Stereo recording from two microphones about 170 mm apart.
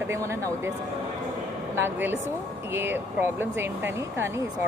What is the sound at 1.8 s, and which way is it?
Speech, 10° right (ahead or behind).